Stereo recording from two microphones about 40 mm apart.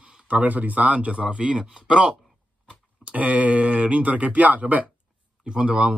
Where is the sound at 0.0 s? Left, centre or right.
Right.